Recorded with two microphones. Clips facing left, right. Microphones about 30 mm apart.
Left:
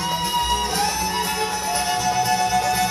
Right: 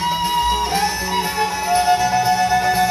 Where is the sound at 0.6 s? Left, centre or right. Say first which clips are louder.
Right 3 dB; right.